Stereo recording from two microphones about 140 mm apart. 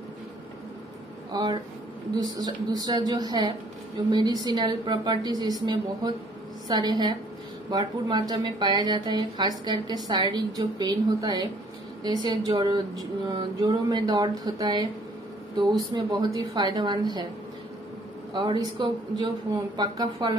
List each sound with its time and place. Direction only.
1.3 s speech: 30° right (ahead or behind)
15.9 s speech: 30° right (ahead or behind)
18.3 s speech: 30° right (ahead or behind)